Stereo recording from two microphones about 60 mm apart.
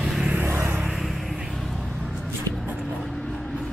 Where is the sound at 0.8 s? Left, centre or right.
Centre.